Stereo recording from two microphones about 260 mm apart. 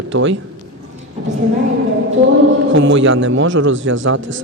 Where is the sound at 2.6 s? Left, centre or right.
Right.